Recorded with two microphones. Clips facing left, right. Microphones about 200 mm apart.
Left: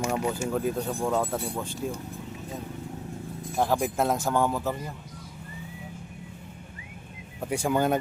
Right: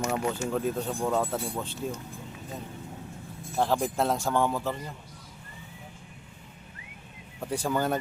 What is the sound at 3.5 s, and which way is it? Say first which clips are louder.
Speech: left 1 dB; 10° left (ahead or behind).